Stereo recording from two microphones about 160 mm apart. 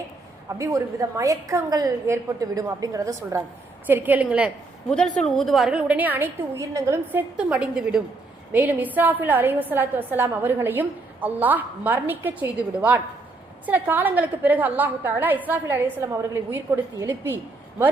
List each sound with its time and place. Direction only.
0.4 s a woman's voice: 20° right (ahead or behind)